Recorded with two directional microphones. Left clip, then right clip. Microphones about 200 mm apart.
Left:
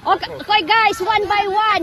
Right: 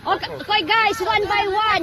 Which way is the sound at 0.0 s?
45° left (ahead or behind).